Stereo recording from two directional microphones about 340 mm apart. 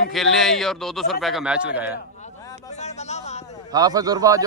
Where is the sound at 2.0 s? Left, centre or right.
Centre.